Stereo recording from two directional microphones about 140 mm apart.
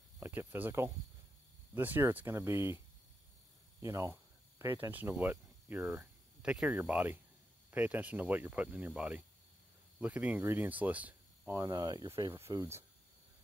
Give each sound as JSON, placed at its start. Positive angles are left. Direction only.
{"t": 0.2, "sound": "speech", "side_deg": -15}
{"t": 3.8, "sound": "speech", "side_deg": -20}